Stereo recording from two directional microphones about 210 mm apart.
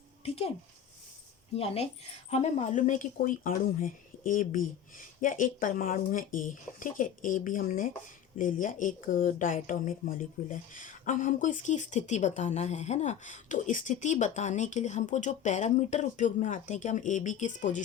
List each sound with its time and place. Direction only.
1.5 s speech: 30° left (ahead or behind)